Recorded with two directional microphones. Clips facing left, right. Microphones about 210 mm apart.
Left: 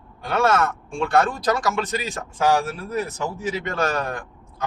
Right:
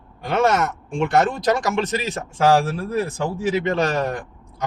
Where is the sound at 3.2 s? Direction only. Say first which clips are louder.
Right 5 dB; 25° right (ahead or behind).